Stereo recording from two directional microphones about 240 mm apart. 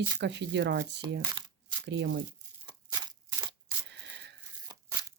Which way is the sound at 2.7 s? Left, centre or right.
Centre.